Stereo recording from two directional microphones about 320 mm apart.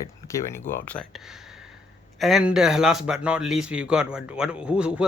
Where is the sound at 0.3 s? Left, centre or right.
Centre.